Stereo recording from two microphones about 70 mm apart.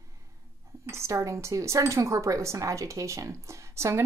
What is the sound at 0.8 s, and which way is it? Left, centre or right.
A woman's voice, right.